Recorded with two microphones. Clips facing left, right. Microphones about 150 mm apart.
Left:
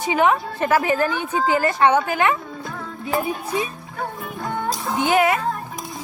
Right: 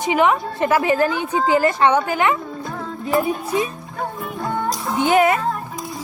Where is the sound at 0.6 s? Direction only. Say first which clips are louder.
Right 2 dB; 30° right (ahead or behind).